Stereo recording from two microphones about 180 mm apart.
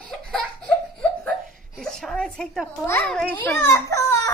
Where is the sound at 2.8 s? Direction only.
10° left (ahead or behind).